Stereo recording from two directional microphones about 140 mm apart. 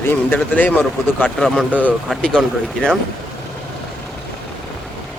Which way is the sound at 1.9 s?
Centre (ahead or behind).